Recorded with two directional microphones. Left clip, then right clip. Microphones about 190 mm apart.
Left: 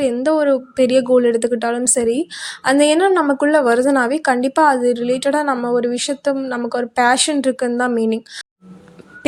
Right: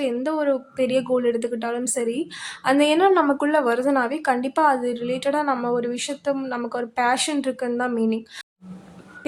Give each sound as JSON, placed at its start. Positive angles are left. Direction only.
{"t": 0.0, "sound": "speech", "side_deg": 20}